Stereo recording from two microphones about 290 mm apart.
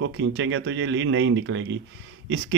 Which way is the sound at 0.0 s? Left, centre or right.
Right.